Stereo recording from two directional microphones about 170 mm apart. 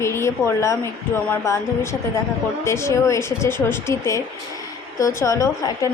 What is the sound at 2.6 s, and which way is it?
A woman's voice, 15° left (ahead or behind).